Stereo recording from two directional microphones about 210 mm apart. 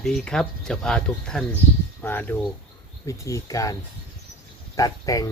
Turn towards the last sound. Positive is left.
turn(degrees=15)  # may be behind; listen again after turning